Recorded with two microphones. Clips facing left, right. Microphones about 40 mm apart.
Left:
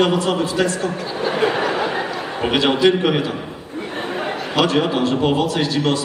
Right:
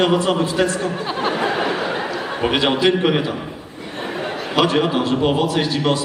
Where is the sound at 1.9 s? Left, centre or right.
Centre.